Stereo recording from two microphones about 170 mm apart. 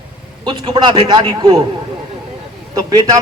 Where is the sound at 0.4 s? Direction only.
25° right (ahead or behind).